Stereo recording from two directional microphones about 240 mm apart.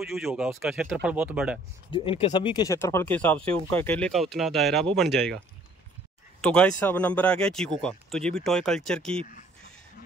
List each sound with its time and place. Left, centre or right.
0.0 s speech: centre
1.9 s speech: left; by 5.4 s centre
6.4 s speech: centre